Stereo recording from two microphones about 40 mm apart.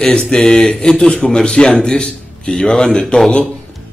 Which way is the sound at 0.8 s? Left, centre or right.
Centre.